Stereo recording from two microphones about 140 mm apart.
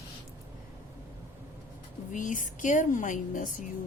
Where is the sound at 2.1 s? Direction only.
65° left (ahead or behind).